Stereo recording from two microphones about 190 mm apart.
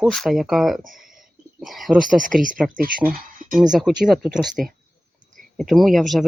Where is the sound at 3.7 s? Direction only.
Centre (ahead or behind).